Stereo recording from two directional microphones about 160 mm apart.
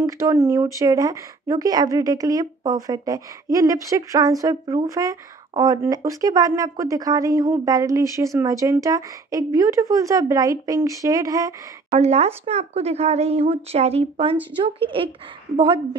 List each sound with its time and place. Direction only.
0.0 s speech: 20° right (ahead or behind)
12.0 s speech: 40° right (ahead or behind)